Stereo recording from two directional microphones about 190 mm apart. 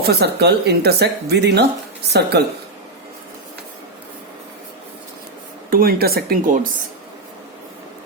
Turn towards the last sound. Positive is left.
turn(degrees=-50)  # may be behind; listen again after turning